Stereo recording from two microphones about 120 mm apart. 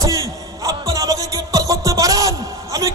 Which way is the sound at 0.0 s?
30° right (ahead or behind).